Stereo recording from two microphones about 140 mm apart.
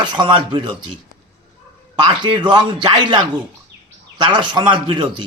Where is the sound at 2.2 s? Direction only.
35° right (ahead or behind).